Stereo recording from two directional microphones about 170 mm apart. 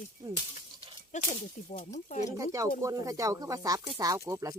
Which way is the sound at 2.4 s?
20° right (ahead or behind).